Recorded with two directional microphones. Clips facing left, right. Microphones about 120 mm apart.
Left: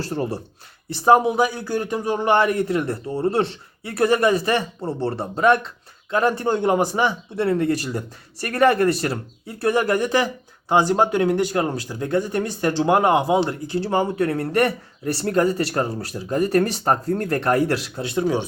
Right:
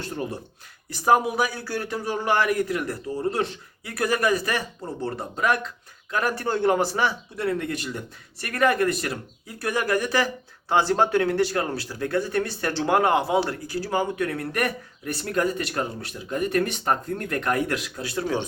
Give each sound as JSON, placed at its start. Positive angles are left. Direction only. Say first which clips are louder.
{"t": 0.0, "sound": "a man's voice", "louder": "left 5 dB", "side_deg": 35}
{"t": 7.4, "sound": "a man's voice", "louder": "left 6 dB", "side_deg": 35}